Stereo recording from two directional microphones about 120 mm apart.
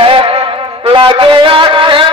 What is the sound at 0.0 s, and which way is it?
Music, 50° right (ahead or behind).